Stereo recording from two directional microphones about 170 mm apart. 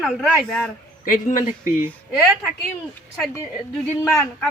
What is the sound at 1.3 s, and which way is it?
Speech, 50° left (ahead or behind).